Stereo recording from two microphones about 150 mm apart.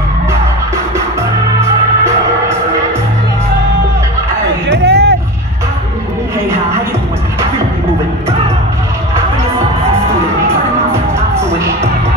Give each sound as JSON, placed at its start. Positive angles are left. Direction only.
{"t": 4.8, "sound": "vehicle", "side_deg": -90}